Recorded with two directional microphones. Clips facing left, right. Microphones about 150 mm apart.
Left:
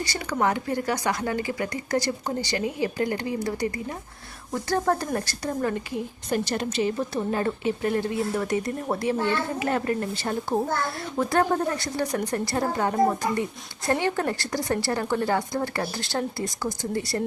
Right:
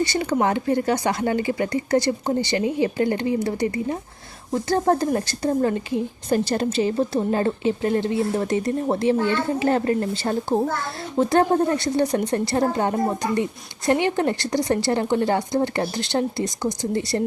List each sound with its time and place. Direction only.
0.0 s a woman's voice: 25° right (ahead or behind)